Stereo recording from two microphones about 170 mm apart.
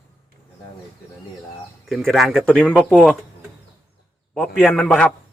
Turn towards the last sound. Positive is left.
turn(degrees=0)  # may be behind; listen again after turning